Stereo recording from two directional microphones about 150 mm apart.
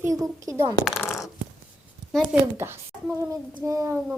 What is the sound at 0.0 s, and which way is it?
Speech, 25° right (ahead or behind).